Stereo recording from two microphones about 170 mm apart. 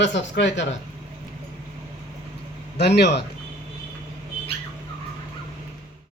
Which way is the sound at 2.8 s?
75° left (ahead or behind).